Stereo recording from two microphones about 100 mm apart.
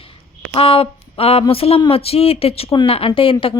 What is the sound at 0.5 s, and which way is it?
Speech, 70° left (ahead or behind).